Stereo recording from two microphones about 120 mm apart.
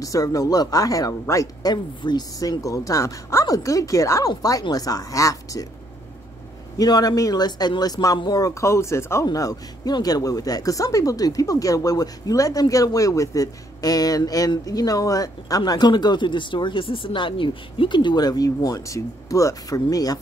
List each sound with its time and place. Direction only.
0.0 s speech: 30° left (ahead or behind)
6.8 s speech: 35° left (ahead or behind)